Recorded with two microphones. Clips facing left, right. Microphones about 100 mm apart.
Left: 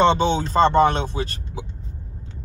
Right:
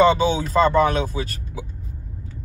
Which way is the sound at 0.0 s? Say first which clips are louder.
Right 1 dB; 30° left (ahead or behind).